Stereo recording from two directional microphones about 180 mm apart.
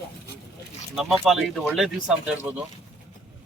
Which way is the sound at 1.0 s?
Centre (ahead or behind).